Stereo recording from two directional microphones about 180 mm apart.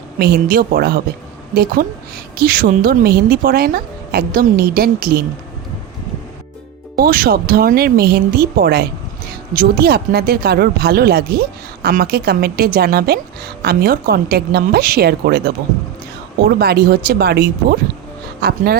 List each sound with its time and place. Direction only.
0.2 s speech: 55° right (ahead or behind)
6.9 s speech: 55° right (ahead or behind)